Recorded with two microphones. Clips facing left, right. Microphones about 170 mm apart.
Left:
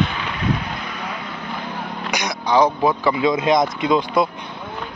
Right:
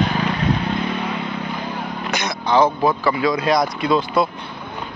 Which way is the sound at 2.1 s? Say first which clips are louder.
Even; 15° left (ahead or behind).